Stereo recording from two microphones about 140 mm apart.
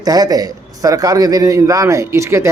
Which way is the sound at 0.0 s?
25° right (ahead or behind).